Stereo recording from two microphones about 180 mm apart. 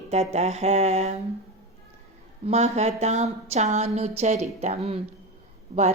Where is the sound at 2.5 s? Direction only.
35° right (ahead or behind).